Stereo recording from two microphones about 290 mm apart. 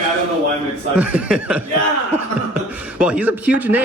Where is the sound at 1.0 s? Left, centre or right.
Centre.